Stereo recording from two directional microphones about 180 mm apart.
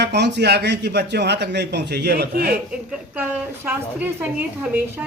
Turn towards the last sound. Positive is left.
turn(degrees=-10)  # may be behind; listen again after turning